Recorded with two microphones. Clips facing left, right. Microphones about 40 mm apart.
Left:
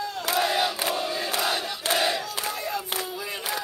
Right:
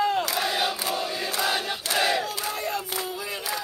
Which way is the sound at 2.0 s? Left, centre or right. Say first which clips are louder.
Right 4 dB; right.